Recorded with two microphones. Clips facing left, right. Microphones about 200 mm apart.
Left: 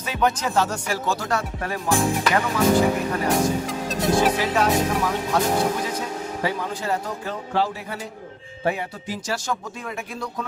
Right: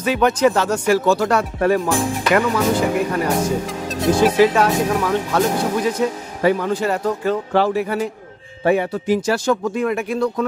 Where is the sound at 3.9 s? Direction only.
Centre (ahead or behind).